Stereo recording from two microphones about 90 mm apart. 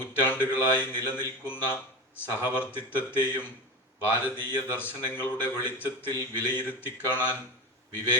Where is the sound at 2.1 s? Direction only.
25° left (ahead or behind).